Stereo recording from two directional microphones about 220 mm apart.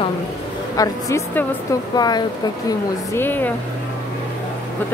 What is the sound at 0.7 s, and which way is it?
Speech, 15° left (ahead or behind).